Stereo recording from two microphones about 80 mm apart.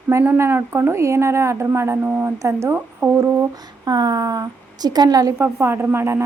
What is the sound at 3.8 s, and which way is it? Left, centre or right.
A woman's voice, right.